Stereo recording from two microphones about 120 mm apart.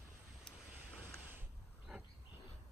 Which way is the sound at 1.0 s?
15° right (ahead or behind).